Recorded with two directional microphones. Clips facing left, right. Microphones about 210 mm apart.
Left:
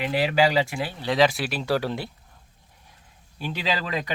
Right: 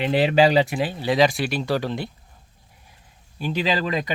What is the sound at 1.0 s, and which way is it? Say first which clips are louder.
Speech: right 1 dB; centre (ahead or behind).